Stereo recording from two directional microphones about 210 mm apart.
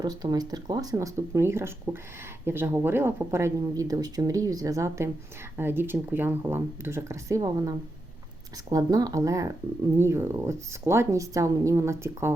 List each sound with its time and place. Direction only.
0.0 s speech: 20° right (ahead or behind)